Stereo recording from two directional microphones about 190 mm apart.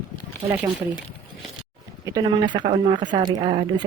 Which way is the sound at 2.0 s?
20° right (ahead or behind).